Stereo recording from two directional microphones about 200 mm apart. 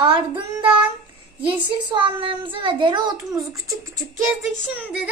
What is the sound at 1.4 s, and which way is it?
A child's voice, 25° right (ahead or behind).